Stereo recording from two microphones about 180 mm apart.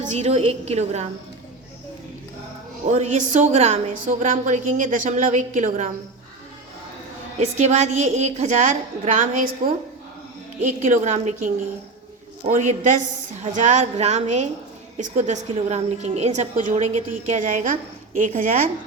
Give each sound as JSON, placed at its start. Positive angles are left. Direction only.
{"t": 0.0, "sound": "a woman's voice", "side_deg": -40}
{"t": 2.8, "sound": "a woman's voice", "side_deg": -40}
{"t": 7.3, "sound": "a woman's voice", "side_deg": -40}